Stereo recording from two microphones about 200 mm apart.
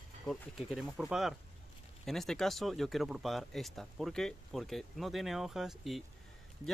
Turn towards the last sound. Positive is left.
turn(degrees=0)  # may be behind; listen again after turning